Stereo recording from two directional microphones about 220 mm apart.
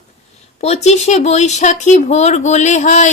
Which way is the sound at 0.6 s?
30° left (ahead or behind).